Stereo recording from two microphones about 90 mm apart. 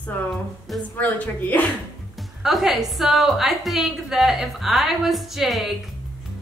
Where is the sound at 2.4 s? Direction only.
5° right (ahead or behind).